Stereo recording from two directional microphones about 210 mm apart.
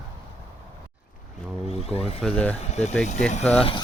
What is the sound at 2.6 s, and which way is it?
Speech, 30° left (ahead or behind).